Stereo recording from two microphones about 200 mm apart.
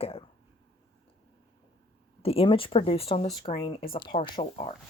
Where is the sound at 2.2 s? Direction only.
30° left (ahead or behind).